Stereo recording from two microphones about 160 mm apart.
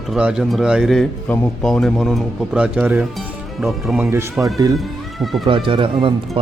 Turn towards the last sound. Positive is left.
turn(degrees=-30)  # may be behind; listen again after turning